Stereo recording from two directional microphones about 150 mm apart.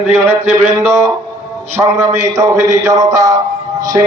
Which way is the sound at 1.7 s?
20° right (ahead or behind).